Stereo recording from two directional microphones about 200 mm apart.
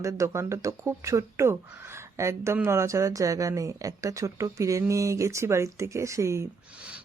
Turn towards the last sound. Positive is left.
turn(degrees=-15)  # may be behind; listen again after turning